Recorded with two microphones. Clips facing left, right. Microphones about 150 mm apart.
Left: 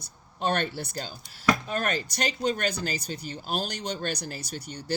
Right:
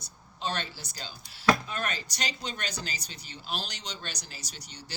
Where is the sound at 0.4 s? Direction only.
55° left (ahead or behind).